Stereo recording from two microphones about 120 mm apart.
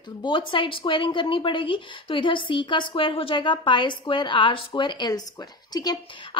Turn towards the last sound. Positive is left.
turn(degrees=35)  # may be behind; listen again after turning